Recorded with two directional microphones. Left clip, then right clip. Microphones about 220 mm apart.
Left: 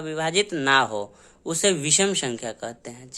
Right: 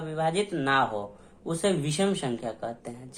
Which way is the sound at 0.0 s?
40° left (ahead or behind).